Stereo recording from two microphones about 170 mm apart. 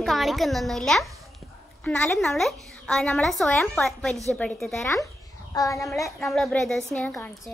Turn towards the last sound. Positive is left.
turn(degrees=10)  # may be behind; listen again after turning